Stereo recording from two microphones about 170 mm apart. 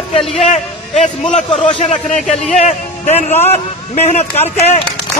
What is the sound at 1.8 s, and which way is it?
A man's voice, 40° left (ahead or behind).